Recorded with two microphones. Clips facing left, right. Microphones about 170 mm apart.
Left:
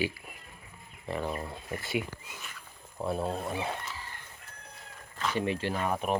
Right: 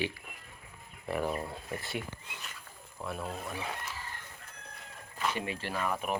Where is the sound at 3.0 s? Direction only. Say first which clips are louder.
Left 7 dB; 30° left (ahead or behind).